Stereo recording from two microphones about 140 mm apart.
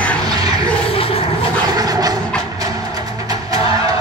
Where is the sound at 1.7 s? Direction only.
25° right (ahead or behind).